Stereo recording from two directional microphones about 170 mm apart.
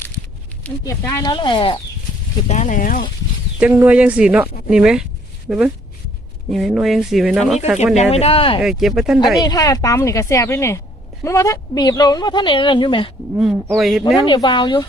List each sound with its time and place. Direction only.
0.9 s speech: 20° left (ahead or behind)
2.5 s speech: 45° left (ahead or behind)
3.6 s a woman's voice: 10° right (ahead or behind)
8.1 s speech: 35° left (ahead or behind)
8.6 s speech: centre (ahead or behind)
9.4 s speech: 20° left (ahead or behind)
13.3 s speech: 10° right (ahead or behind)
14.3 s speech: 25° left (ahead or behind)